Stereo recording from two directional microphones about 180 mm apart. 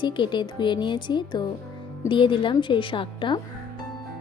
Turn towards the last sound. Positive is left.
turn(degrees=25)  # may be behind; listen again after turning